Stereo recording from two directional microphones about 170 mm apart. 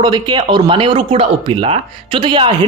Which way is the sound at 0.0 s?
25° right (ahead or behind).